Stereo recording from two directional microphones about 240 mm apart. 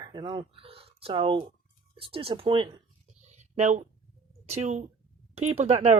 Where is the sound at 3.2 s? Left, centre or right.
Right.